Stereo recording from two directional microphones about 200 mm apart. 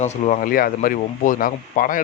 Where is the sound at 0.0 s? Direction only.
35° left (ahead or behind).